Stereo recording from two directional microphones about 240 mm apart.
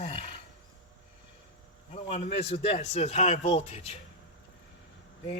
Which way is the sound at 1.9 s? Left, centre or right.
Left.